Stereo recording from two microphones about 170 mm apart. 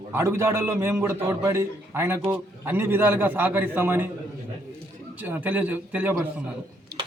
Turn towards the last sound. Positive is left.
turn(degrees=-65)  # may be behind; listen again after turning